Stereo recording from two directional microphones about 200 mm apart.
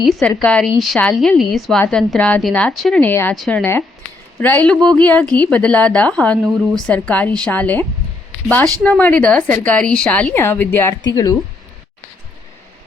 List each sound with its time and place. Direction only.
0.2 s speech: 5° left (ahead or behind)